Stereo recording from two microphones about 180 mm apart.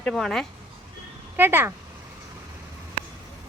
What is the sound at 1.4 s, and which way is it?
Speech, 10° right (ahead or behind).